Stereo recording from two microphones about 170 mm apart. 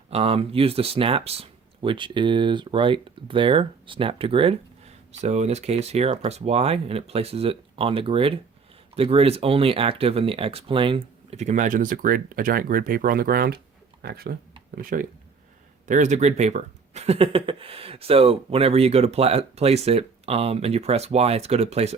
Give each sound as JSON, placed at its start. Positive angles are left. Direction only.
{"t": 0.1, "sound": "speech", "side_deg": -35}
{"t": 15.9, "sound": "speech", "side_deg": -45}